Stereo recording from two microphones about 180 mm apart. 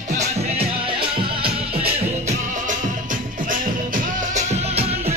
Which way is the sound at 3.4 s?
50° right (ahead or behind).